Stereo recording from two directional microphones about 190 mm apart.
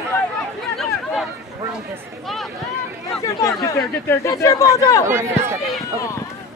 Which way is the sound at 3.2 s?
15° left (ahead or behind).